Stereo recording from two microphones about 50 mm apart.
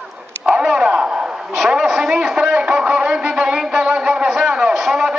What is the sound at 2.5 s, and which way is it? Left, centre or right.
Music, centre.